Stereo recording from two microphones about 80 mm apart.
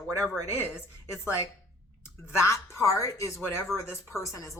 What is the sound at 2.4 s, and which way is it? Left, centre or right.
Speech, left.